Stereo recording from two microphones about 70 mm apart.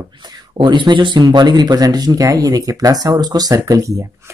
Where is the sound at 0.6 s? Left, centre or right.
Right.